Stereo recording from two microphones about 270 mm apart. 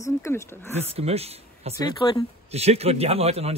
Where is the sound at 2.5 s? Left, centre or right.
Right.